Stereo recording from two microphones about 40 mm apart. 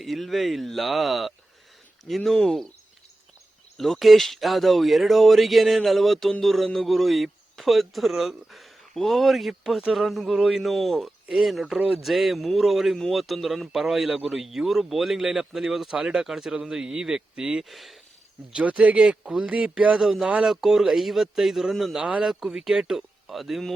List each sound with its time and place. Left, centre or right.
0.0 s speech: centre
3.8 s a man's voice: centre; by 17.6 s right
17.6 s speech: centre
18.9 s a man's voice: right
20.0 s speech: centre
20.3 s a man's voice: centre
20.6 s speech: centre